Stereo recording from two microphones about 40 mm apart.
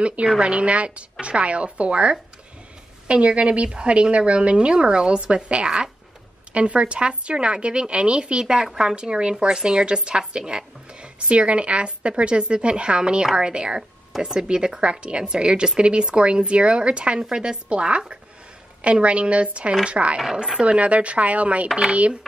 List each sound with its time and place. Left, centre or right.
0.0 s speech: right